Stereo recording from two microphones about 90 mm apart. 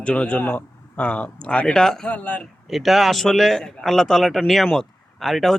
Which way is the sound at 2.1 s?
15° left (ahead or behind).